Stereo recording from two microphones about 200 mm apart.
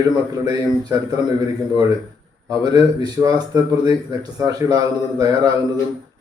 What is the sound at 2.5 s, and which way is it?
A man's voice, 20° right (ahead or behind).